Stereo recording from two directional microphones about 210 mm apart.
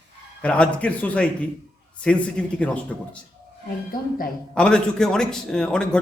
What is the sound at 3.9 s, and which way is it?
Speech, 45° left (ahead or behind).